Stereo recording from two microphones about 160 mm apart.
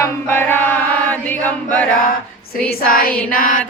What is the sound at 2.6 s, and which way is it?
Music, 65° left (ahead or behind).